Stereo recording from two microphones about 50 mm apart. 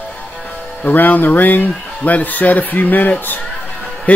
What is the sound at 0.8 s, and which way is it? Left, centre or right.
A man's voice, left.